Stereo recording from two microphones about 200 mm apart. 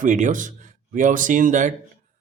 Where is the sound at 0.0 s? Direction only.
40° right (ahead or behind).